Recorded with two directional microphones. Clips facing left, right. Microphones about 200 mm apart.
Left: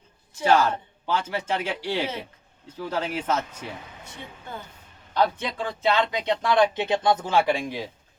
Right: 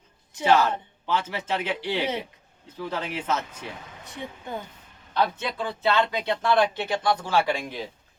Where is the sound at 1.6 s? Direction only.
10° left (ahead or behind).